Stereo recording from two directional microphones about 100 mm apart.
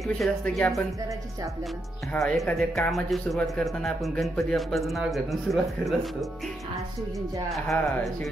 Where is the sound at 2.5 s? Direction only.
Centre (ahead or behind).